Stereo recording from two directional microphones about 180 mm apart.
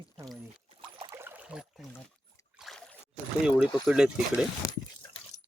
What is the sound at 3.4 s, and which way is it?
Speech, 5° right (ahead or behind).